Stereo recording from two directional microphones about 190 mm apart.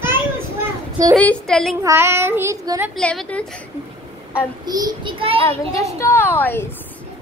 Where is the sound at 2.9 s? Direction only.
5° left (ahead or behind).